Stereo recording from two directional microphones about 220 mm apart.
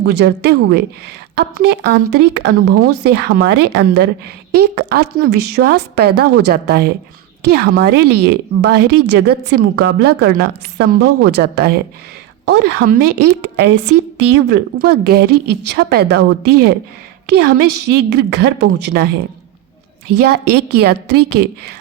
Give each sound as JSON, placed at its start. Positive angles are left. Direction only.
{"t": 0.0, "sound": "speech", "side_deg": -50}
{"t": 13.1, "sound": "a woman's voice", "side_deg": -90}
{"t": 14.3, "sound": "speech", "side_deg": -50}
{"t": 20.4, "sound": "a woman's voice", "side_deg": -90}
{"t": 20.8, "sound": "speech", "side_deg": -50}